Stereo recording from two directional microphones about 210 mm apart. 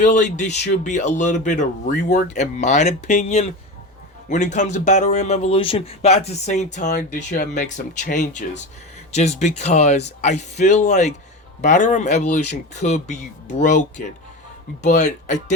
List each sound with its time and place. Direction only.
0.0 s speech: 35° left (ahead or behind)